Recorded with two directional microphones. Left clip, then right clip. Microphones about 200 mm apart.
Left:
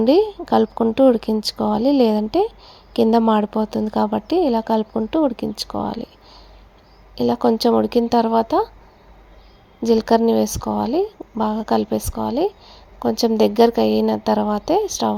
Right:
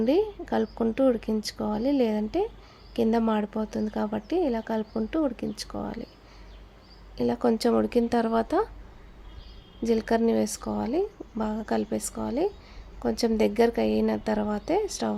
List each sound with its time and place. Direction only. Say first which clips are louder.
0.0 s speech: left 9 dB; 20° left (ahead or behind)
7.2 s a woman's voice: left 7 dB; 10° left (ahead or behind)
9.8 s a woman's voice: left 9 dB; 15° left (ahead or behind)